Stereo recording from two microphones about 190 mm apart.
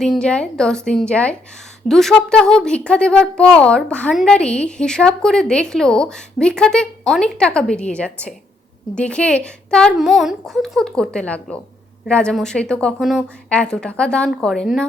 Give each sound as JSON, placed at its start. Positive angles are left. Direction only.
{"t": 0.0, "sound": "speech", "side_deg": 5}